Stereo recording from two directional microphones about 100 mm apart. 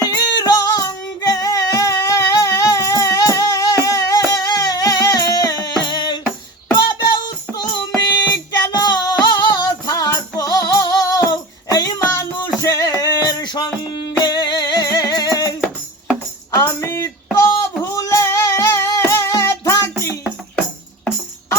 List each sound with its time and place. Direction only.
0.0 s music: 40° left (ahead or behind)
16.6 s music: 30° left (ahead or behind)